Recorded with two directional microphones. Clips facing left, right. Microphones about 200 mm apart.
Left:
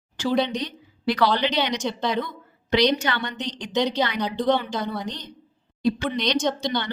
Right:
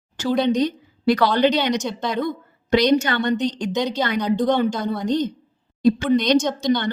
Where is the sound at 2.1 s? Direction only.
45° right (ahead or behind).